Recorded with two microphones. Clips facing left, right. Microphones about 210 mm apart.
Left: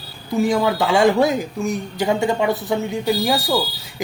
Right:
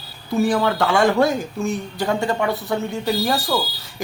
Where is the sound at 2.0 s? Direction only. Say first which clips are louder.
Left 3 dB; 15° left (ahead or behind).